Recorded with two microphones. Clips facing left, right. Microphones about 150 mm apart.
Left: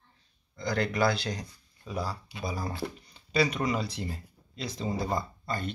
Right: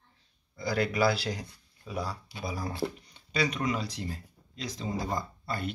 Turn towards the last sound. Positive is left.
turn(degrees=-5)  # may be behind; listen again after turning